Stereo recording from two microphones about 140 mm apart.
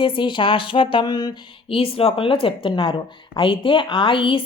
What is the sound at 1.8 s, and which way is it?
A woman's voice, 40° left (ahead or behind).